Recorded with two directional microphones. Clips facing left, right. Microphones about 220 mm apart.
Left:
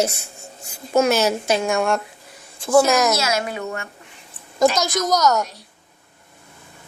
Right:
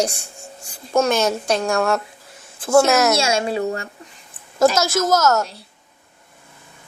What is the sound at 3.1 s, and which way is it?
Speech, 25° right (ahead or behind).